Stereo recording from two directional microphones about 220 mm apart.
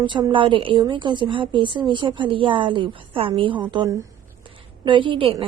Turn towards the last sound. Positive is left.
turn(degrees=-25)  # may be behind; listen again after turning